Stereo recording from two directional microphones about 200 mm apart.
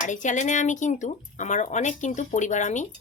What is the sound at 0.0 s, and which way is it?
Speech, 40° left (ahead or behind).